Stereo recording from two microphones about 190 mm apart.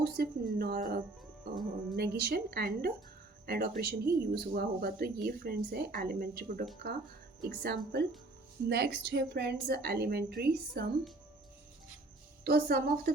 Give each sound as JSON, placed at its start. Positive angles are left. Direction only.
{"t": 0.0, "sound": "a woman's voice", "side_deg": -55}
{"t": 12.5, "sound": "a woman's voice", "side_deg": -55}